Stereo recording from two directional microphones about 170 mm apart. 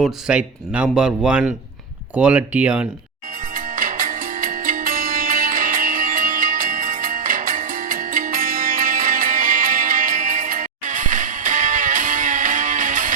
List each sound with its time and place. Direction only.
0.0 s speech: 5° right (ahead or behind)
3.5 s music: 55° right (ahead or behind)